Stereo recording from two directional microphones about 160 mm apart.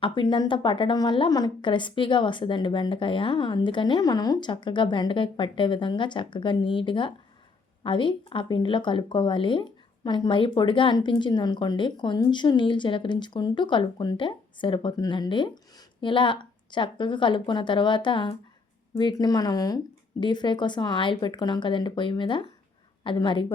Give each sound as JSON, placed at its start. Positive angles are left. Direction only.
{"t": 0.0, "sound": "a woman's voice", "side_deg": 30}